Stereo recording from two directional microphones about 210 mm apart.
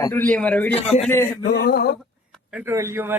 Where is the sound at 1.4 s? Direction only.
50° left (ahead or behind).